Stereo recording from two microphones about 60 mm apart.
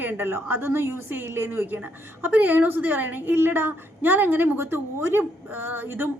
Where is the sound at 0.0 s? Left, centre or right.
Right.